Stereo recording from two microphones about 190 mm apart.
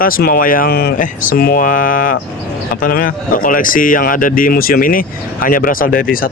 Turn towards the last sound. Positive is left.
turn(degrees=50)  # may be behind; listen again after turning